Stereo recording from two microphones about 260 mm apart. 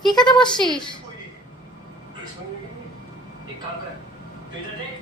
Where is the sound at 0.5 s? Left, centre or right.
Centre.